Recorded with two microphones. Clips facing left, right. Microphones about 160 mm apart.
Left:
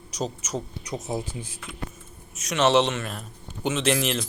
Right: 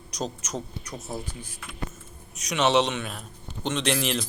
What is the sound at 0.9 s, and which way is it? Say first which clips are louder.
Speech: left 5 dB; 20° left (ahead or behind).